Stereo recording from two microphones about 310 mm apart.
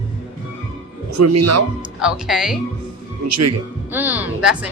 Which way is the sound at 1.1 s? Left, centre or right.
Right.